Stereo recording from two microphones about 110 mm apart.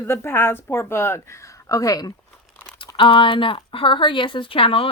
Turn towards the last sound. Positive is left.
turn(degrees=55)  # may be behind; listen again after turning